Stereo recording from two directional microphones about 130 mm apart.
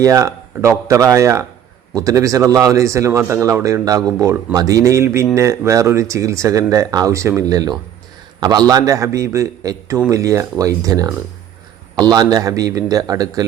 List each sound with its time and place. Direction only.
0.0 s speech: 25° right (ahead or behind)